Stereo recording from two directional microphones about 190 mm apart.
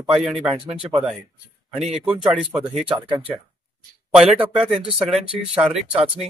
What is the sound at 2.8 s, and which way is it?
Speech, 25° right (ahead or behind).